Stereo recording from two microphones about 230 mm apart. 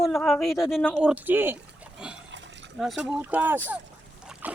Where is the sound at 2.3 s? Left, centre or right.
Right.